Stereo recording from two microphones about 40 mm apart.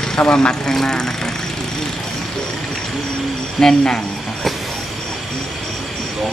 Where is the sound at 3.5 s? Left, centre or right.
Centre.